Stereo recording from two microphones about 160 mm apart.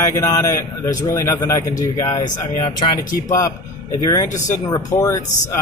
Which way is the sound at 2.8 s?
35° left (ahead or behind).